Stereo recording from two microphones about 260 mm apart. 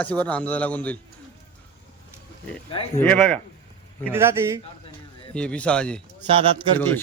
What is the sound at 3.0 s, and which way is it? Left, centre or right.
Speech, centre.